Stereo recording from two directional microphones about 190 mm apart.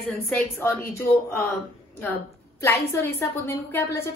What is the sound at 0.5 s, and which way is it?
Speech, 10° left (ahead or behind).